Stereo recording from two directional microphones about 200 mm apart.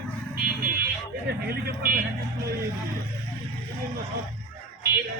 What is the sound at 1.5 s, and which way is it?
Speech, 45° right (ahead or behind).